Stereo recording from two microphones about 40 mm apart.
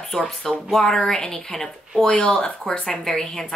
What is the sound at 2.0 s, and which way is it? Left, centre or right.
Speech, left.